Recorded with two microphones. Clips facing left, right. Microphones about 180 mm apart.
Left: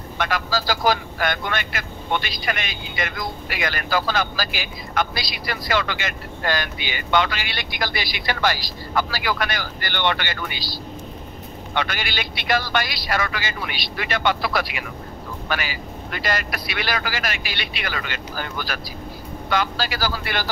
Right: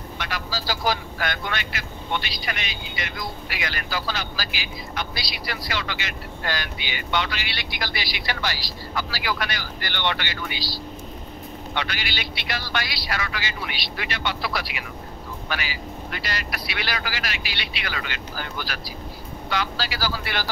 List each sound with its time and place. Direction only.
0.2 s speech: 50° left (ahead or behind)